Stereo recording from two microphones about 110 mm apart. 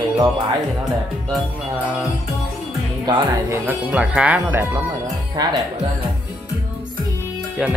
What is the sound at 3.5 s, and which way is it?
Speech, 20° right (ahead or behind).